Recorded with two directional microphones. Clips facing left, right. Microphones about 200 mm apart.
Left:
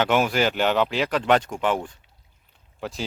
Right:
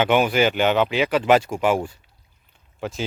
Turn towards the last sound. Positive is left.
turn(degrees=0)  # may be behind; listen again after turning